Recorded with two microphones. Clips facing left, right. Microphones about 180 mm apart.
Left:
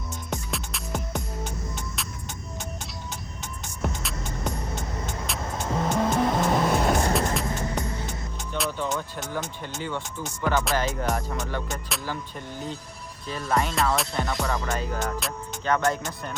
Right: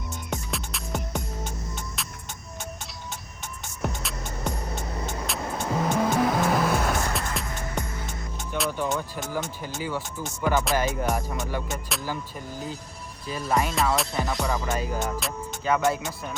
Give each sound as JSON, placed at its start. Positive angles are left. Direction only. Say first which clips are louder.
{"t": 0.3, "sound": "music", "louder": "even", "side_deg": 0}
{"t": 3.8, "sound": "music", "louder": "even", "side_deg": 0}
{"t": 5.2, "sound": "vehicle", "louder": "right 2 dB", "side_deg": 0}
{"t": 6.7, "sound": "music", "louder": "left 3 dB", "side_deg": 35}
{"t": 8.5, "sound": "speech", "louder": "right 1 dB", "side_deg": 0}
{"t": 13.2, "sound": "speech", "louder": "even", "side_deg": -10}